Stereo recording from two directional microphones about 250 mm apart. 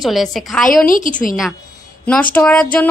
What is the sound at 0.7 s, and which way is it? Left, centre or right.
Speech, left.